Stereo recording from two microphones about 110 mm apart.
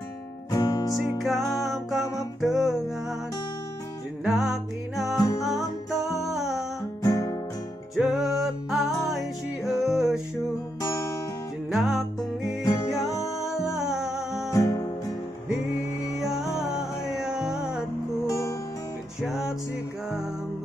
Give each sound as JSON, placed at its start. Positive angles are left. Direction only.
{"t": 0.5, "sound": "music", "side_deg": 35}
{"t": 0.9, "sound": "music", "side_deg": 0}
{"t": 4.2, "sound": "music", "side_deg": 0}
{"t": 5.1, "sound": "music", "side_deg": 30}
{"t": 6.2, "sound": "music", "side_deg": -5}
{"t": 7.0, "sound": "music", "side_deg": 35}
{"t": 7.9, "sound": "music", "side_deg": 0}
{"t": 11.7, "sound": "music", "side_deg": 0}
{"t": 14.5, "sound": "music", "side_deg": 30}
{"t": 16.2, "sound": "music", "side_deg": -5}
{"t": 18.2, "sound": "music", "side_deg": 30}
{"t": 19.2, "sound": "music", "side_deg": -5}